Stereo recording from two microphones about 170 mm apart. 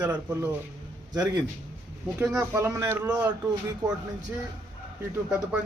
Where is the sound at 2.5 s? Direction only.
15° right (ahead or behind).